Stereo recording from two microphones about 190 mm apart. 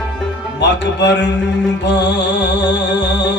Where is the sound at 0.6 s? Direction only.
65° left (ahead or behind).